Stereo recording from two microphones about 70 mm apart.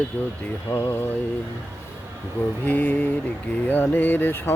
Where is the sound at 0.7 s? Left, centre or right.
Left.